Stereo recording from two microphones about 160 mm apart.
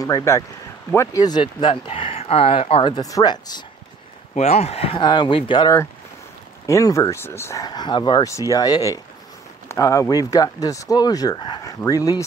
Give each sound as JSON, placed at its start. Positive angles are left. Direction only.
{"t": 0.0, "sound": "speech", "side_deg": 20}
{"t": 4.4, "sound": "speech", "side_deg": 40}
{"t": 6.6, "sound": "speech", "side_deg": 20}